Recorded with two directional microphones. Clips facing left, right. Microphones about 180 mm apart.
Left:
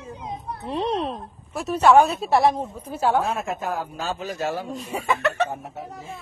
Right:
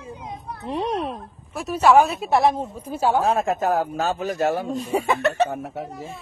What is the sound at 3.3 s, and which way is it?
Speech, 40° right (ahead or behind).